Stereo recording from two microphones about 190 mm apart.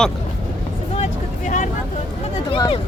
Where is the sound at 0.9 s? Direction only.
40° left (ahead or behind).